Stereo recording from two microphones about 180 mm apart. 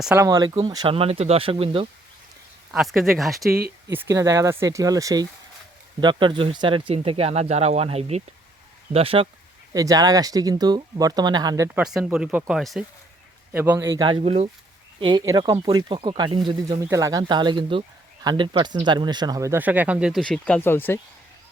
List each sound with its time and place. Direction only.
0.0 s speech: 5° right (ahead or behind)
0.3 s speech: 25° right (ahead or behind)
2.7 s speech: centre (ahead or behind)
3.5 s speech: 60° right (ahead or behind)
3.9 s speech: 15° right (ahead or behind); by 9.2 s 30° right (ahead or behind)
9.7 s speech: 20° right (ahead or behind)
11.8 s speech: 5° right (ahead or behind)
13.9 s speech: 25° right (ahead or behind)
15.0 s speech: 25° right (ahead or behind); by 21.0 s 10° left (ahead or behind)